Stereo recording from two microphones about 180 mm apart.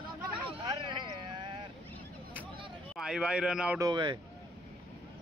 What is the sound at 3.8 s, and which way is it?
Speech, 25° right (ahead or behind).